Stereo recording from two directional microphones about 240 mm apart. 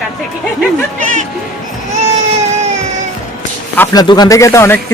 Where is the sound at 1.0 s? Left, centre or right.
Right.